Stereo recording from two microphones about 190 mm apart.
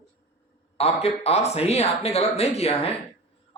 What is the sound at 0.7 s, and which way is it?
A man's voice, 30° left (ahead or behind).